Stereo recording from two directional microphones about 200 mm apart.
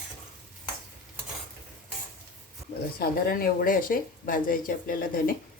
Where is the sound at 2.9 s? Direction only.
50° left (ahead or behind).